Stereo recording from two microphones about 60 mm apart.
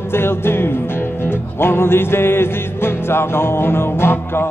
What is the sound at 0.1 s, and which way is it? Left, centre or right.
Music, left.